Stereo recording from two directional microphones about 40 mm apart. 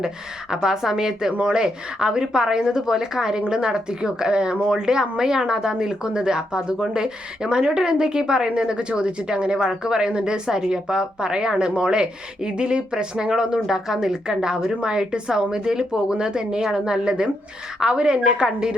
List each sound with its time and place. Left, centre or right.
0.5 s a woman's voice: centre